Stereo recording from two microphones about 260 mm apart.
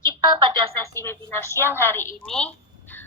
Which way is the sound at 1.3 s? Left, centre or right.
Centre.